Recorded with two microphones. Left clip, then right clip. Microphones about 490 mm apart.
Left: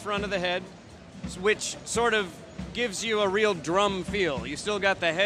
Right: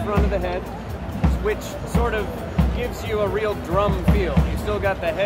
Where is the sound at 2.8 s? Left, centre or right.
Left.